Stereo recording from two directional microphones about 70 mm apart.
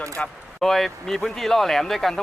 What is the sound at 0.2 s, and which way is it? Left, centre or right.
Speech, centre.